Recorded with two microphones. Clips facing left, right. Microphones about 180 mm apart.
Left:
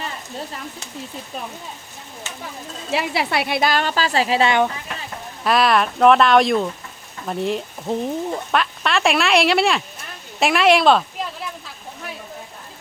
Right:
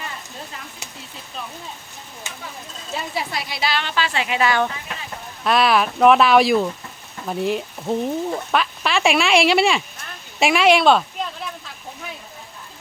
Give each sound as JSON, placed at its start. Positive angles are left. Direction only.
{"t": 2.9, "sound": "a woman's voice", "side_deg": 75}
{"t": 5.4, "sound": "speech", "side_deg": 0}